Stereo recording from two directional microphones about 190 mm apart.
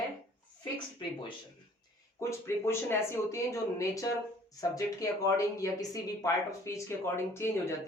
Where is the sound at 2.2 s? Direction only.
15° left (ahead or behind).